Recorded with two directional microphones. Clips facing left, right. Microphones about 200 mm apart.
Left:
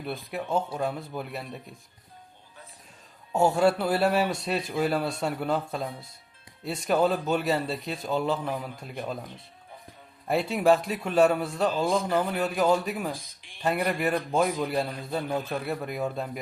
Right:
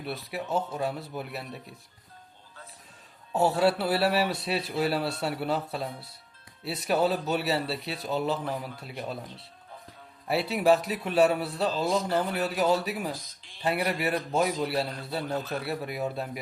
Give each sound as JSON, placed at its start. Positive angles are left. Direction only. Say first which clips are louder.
{"t": 0.1, "sound": "a man's voice", "louder": "left 2 dB", "side_deg": -5}
{"t": 3.3, "sound": "a man's voice", "louder": "left 2 dB", "side_deg": -5}
{"t": 10.2, "sound": "a man's voice", "louder": "left 1 dB", "side_deg": -5}
{"t": 12.0, "sound": "a man's voice", "louder": "left 1 dB", "side_deg": 10}
{"t": 12.3, "sound": "a man's voice", "louder": "left 2 dB", "side_deg": -5}
{"t": 13.1, "sound": "a sound", "louder": "even", "side_deg": 10}
{"t": 13.7, "sound": "a man's voice", "louder": "left 2 dB", "side_deg": -5}
{"t": 15.3, "sound": "a man's voice", "louder": "left 1 dB", "side_deg": 10}
{"t": 15.6, "sound": "a man's voice", "louder": "left 1 dB", "side_deg": -5}